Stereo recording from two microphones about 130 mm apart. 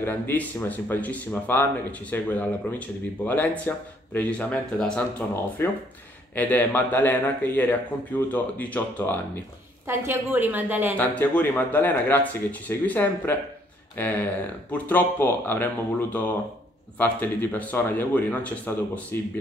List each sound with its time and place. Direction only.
0.0 s speech: 15° left (ahead or behind)
9.8 s a woman's voice: 15° right (ahead or behind)
11.0 s speech: 15° left (ahead or behind)